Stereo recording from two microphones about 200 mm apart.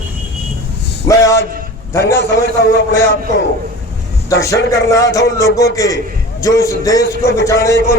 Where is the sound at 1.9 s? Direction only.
15° left (ahead or behind).